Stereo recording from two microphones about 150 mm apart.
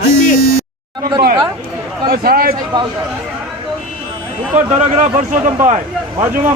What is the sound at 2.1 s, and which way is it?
Speech, 85° right.